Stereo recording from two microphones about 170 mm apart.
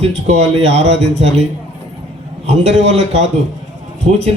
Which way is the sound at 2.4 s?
40° right (ahead or behind).